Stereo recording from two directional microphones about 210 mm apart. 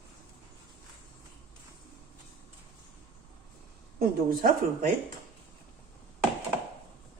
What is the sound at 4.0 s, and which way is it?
Speech, 45° right (ahead or behind).